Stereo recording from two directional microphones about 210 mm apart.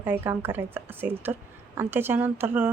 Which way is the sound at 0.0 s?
10° right (ahead or behind).